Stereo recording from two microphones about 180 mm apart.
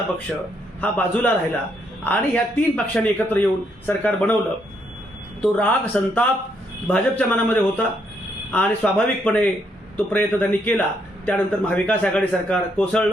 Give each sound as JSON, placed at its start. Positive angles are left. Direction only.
{"t": 0.3, "sound": "a man's voice", "side_deg": 5}
{"t": 5.4, "sound": "a man's voice", "side_deg": 10}